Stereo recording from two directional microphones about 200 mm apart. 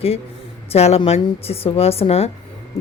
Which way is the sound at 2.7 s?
15° left (ahead or behind).